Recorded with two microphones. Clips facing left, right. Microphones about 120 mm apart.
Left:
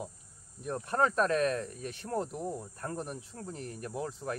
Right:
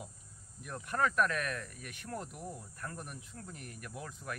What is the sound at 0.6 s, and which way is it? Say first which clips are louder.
Speech: left 5 dB; 30° left (ahead or behind).